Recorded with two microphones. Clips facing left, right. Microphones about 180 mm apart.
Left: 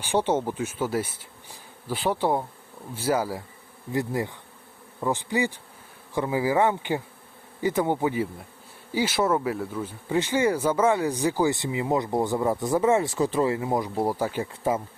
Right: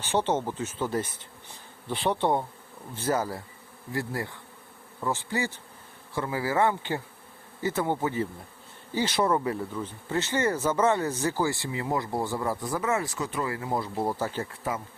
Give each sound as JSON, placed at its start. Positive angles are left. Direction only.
{"t": 0.0, "sound": "speech", "side_deg": 10}
{"t": 3.9, "sound": "bee", "side_deg": 20}
{"t": 4.9, "sound": "speech", "side_deg": 15}